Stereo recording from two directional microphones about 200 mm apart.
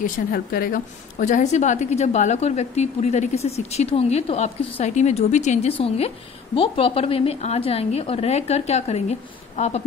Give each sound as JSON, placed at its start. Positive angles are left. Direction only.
{"t": 0.0, "sound": "a woman's voice", "side_deg": 50}